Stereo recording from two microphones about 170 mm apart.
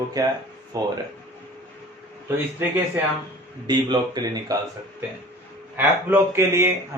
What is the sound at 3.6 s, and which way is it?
Speech, 25° right (ahead or behind).